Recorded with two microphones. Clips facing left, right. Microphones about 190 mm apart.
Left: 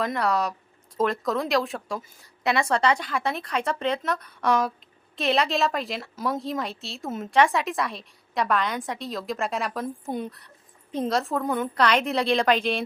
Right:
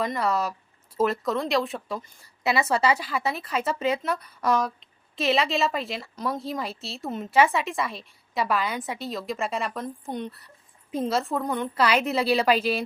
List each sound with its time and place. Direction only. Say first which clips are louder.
0.0 s a woman's voice: left 1 dB; centre (ahead or behind)